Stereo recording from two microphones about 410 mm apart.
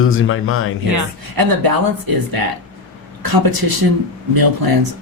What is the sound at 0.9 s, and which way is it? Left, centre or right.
A woman's voice, right.